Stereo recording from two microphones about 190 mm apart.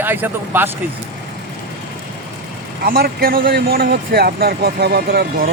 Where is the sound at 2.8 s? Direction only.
50° right (ahead or behind).